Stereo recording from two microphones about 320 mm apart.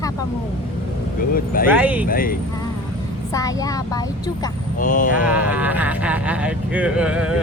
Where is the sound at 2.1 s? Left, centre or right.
Left.